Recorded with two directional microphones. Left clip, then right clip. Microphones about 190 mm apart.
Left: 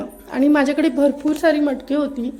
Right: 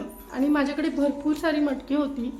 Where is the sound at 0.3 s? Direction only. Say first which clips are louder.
Left 8 dB; 40° left (ahead or behind).